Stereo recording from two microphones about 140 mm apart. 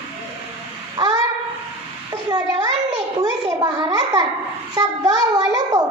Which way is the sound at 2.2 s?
30° right (ahead or behind).